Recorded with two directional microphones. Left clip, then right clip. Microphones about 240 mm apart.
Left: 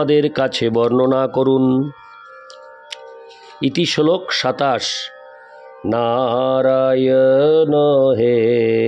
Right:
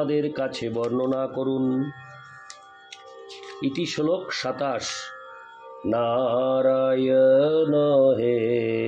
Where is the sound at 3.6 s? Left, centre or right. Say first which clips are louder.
Left 10 dB; left.